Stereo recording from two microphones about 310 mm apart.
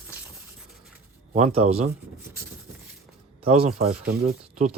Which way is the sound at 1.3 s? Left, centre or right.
Centre.